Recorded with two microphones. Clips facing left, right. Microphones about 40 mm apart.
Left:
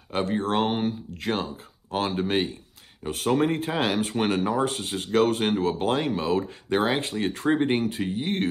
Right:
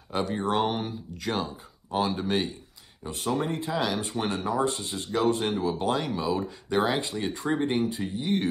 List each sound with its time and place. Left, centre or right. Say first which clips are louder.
0.1 s speech: left 2 dB; left
3.3 s speech: left 5 dB; left
5.8 s speech: left 3 dB; left